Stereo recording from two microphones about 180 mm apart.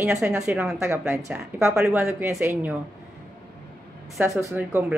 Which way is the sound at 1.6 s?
5° right (ahead or behind).